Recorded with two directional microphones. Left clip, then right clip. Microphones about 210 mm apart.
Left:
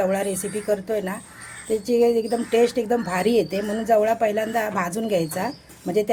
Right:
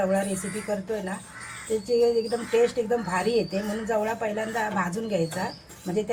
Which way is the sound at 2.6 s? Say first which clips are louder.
Left 3 dB; 50° left (ahead or behind).